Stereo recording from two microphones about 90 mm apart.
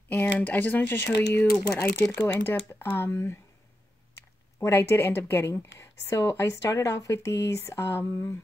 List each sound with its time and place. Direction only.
0.1 s speech: 20° left (ahead or behind)
4.6 s speech: 30° left (ahead or behind)